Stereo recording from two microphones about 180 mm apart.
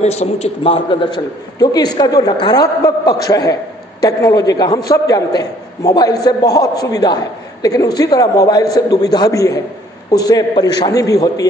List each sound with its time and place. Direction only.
0.0 s a man's voice: 35° left (ahead or behind); by 11.4 s 20° left (ahead or behind)